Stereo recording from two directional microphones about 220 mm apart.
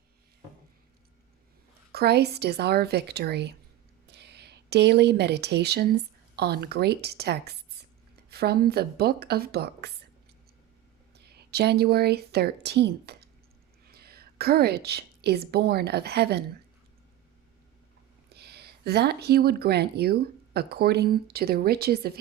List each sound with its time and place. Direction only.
1.9 s speech: 45° right (ahead or behind)
11.3 s a woman's voice: 45° right (ahead or behind)
18.3 s speech: 50° right (ahead or behind)